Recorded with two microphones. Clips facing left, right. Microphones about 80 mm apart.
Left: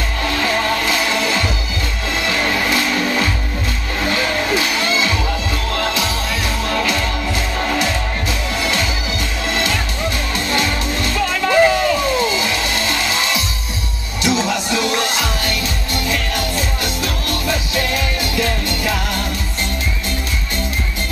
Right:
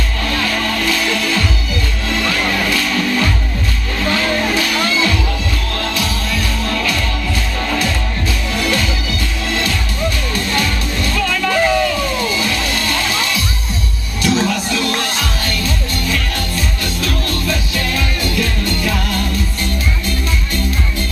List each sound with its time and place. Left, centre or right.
0.6 s music: left
4.6 s music: left
9.6 s music: left